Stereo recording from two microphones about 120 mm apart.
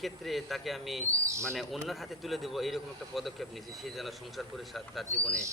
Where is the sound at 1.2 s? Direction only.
25° right (ahead or behind).